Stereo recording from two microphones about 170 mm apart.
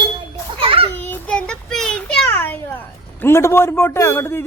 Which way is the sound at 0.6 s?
30° right (ahead or behind).